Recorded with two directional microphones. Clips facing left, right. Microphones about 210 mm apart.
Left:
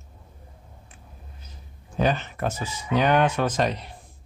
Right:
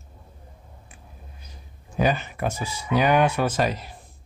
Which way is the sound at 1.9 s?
10° right (ahead or behind).